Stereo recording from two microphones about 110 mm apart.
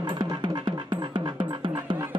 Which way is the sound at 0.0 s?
40° right (ahead or behind).